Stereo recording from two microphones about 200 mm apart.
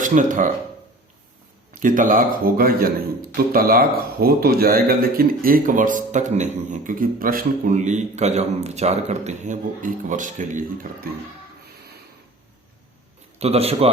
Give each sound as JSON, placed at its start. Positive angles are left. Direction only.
{"t": 0.0, "sound": "a man's voice", "side_deg": -40}
{"t": 1.7, "sound": "a man's voice", "side_deg": -40}
{"t": 13.4, "sound": "a man's voice", "side_deg": -30}